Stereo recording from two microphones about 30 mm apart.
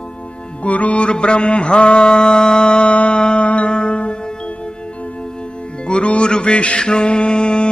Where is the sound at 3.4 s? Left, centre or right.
Left.